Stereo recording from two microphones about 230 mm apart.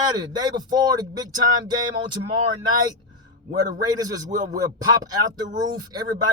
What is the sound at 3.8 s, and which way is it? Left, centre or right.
A man's voice, centre.